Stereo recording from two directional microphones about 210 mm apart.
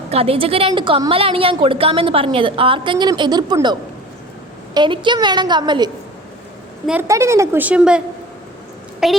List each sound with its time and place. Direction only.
0.1 s a woman's voice: 30° right (ahead or behind)
6.8 s a woman's voice: 10° right (ahead or behind)